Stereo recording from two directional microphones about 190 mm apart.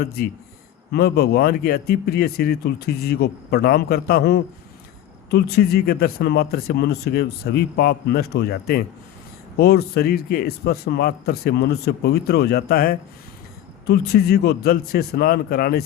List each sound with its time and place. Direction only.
0.0 s speech: 55° left (ahead or behind)